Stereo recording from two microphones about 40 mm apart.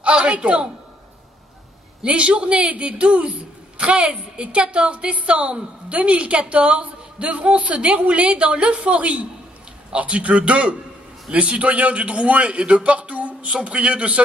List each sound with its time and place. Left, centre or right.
0.0 s a man's voice: right
2.0 s a woman's voice: right
13.5 s a man's voice: right